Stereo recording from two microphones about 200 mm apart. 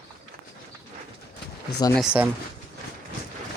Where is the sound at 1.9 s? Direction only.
5° right (ahead or behind).